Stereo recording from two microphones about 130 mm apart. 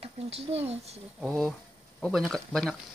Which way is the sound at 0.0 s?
50° right (ahead or behind).